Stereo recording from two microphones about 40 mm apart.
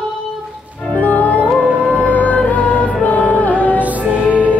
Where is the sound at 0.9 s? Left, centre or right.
Left.